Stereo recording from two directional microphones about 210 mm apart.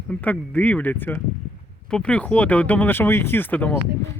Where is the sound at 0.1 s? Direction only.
5° left (ahead or behind).